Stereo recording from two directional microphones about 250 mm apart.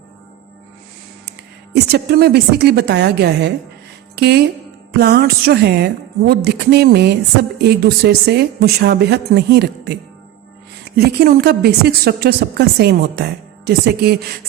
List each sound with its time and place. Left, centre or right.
1.7 s speech: right